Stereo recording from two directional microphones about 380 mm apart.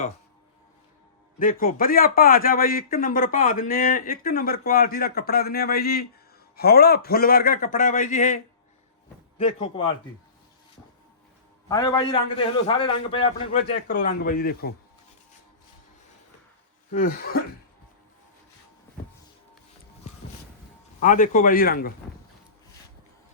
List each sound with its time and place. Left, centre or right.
1.4 s a man's voice: left
9.4 s a man's voice: centre
11.7 s a man's voice: centre
16.9 s a man's voice: left
21.0 s a man's voice: centre